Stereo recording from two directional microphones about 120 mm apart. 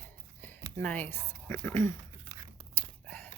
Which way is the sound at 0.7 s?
15° left (ahead or behind).